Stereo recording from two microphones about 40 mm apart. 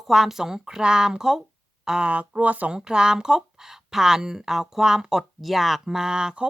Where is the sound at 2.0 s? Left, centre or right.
Right.